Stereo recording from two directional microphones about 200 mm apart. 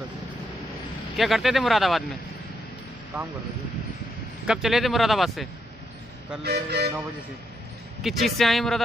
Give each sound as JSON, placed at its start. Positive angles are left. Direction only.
{"t": 1.1, "sound": "speech", "side_deg": 0}
{"t": 4.5, "sound": "speech", "side_deg": 0}
{"t": 6.4, "sound": "vehicle", "side_deg": -55}
{"t": 8.0, "sound": "speech", "side_deg": 0}